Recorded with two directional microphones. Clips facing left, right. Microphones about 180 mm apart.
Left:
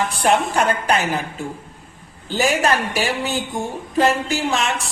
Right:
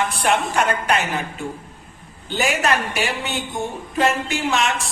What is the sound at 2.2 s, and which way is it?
A woman's voice, 35° left (ahead or behind).